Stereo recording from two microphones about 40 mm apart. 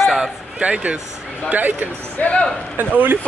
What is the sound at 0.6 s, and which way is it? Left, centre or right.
Speech, right.